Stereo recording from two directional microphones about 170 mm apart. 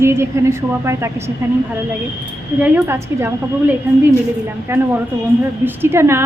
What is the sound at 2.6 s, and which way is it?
A woman's voice, 10° right (ahead or behind).